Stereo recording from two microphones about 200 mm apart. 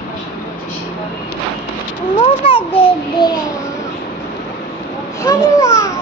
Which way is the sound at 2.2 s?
25° left (ahead or behind).